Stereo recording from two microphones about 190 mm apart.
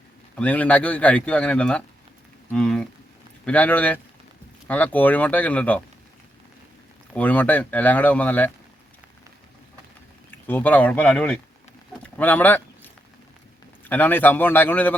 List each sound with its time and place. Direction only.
0.3 s speech: 10° left (ahead or behind)
7.1 s speech: 5° left (ahead or behind)
10.3 s speech: 10° left (ahead or behind)
13.8 s speech: 10° left (ahead or behind)